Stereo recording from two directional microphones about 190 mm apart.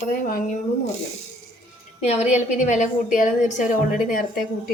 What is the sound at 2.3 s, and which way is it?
A woman's voice, 40° left (ahead or behind).